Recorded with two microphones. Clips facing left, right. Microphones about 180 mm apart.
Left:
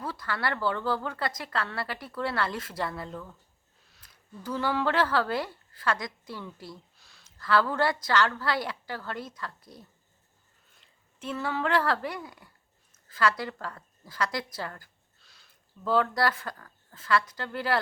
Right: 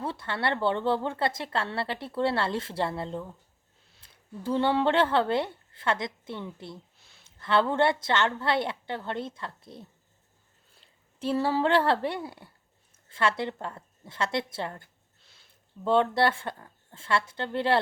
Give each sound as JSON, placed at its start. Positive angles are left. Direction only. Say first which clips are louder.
{"t": 0.0, "sound": "a woman's voice", "louder": "right 2 dB", "side_deg": -25}